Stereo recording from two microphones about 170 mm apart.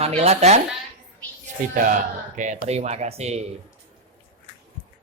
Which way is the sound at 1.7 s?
50° right (ahead or behind).